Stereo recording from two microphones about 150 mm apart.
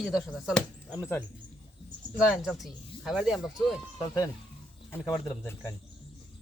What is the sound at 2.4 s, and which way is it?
Speech, centre (ahead or behind).